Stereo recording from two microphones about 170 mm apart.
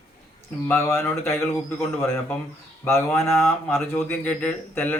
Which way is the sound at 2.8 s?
15° left (ahead or behind).